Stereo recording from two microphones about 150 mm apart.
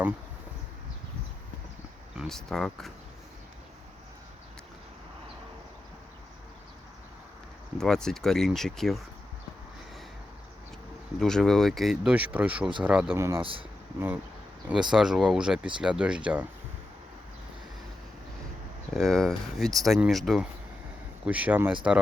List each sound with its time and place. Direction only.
2.1 s speech: centre (ahead or behind)
7.8 s speech: 5° left (ahead or behind)
11.2 s speech: 5° left (ahead or behind)
13.1 s speech: 20° right (ahead or behind)
13.4 s speech: 35° right (ahead or behind)
14.7 s speech: 5° right (ahead or behind)
18.9 s speech: centre (ahead or behind)